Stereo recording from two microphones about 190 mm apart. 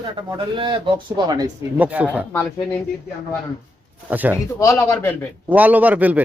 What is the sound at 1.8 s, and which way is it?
Speech, 10° right (ahead or behind).